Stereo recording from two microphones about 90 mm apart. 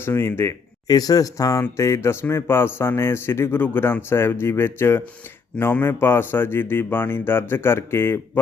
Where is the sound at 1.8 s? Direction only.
30° left (ahead or behind).